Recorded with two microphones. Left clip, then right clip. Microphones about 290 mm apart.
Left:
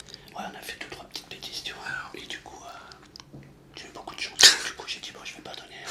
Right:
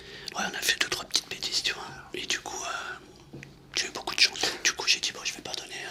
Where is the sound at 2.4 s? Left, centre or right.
Right.